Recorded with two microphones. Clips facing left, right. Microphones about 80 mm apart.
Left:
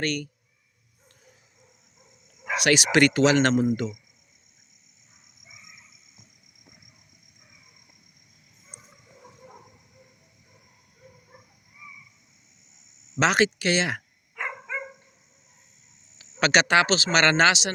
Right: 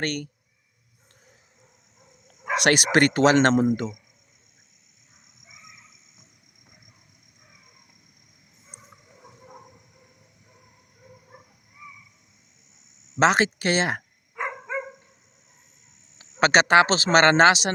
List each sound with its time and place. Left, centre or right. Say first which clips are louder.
0.0 s speech: even; right
2.2 s dog: right 3 dB; right
2.6 s speech: right 1 dB; right
13.1 s speech: right 2 dB; right
14.3 s dog: right 2 dB; right
16.4 s speech: right 3 dB; right